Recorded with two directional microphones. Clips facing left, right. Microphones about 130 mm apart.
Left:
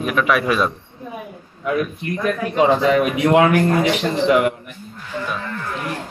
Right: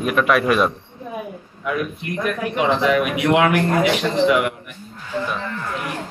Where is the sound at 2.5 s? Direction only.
30° left (ahead or behind).